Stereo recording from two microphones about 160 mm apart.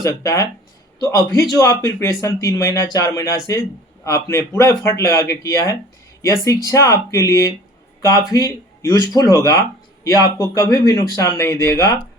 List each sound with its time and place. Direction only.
0.0 s a man's voice: 20° left (ahead or behind)